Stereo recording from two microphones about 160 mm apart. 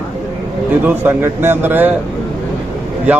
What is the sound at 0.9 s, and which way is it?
A man's voice, 15° right (ahead or behind).